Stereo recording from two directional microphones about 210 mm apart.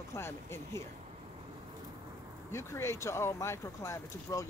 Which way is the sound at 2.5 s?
10° left (ahead or behind).